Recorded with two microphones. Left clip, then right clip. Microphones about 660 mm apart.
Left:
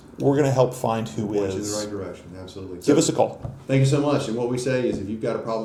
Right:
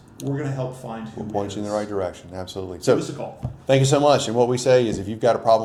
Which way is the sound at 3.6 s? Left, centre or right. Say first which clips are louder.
Right 6 dB; right.